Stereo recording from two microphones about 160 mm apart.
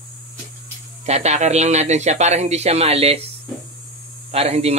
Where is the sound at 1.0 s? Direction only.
45° right (ahead or behind).